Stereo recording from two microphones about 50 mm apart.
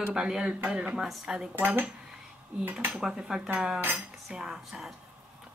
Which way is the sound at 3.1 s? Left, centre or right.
Centre.